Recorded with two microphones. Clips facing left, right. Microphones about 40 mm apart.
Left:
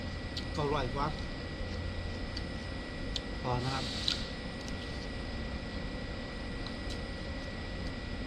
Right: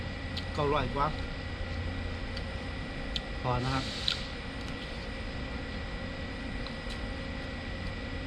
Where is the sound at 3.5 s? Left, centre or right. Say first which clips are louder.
Right 3 dB; right.